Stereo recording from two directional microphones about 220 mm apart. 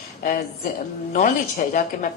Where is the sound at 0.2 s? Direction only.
35° left (ahead or behind).